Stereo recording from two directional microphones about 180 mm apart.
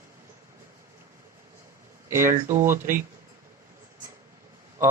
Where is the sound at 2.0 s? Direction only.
15° right (ahead or behind).